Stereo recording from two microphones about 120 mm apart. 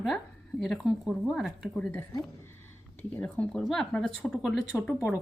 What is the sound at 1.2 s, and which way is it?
Speech, centre (ahead or behind).